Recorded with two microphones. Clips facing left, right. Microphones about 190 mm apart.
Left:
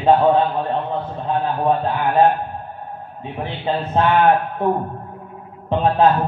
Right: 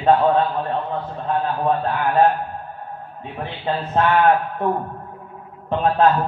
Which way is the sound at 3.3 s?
15° left (ahead or behind).